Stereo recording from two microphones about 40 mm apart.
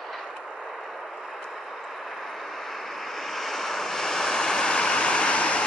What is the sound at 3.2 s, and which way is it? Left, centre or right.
Vehicle, centre.